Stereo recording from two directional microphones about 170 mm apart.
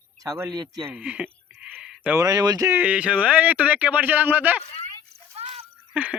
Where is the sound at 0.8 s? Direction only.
10° right (ahead or behind).